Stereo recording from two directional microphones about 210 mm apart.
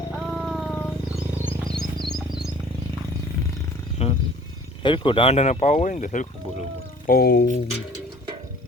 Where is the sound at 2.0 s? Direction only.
Centre (ahead or behind).